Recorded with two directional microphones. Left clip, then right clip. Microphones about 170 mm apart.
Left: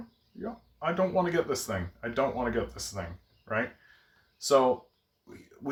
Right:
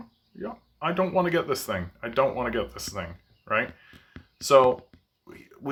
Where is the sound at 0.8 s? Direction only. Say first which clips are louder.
Right 3 dB; 20° right (ahead or behind).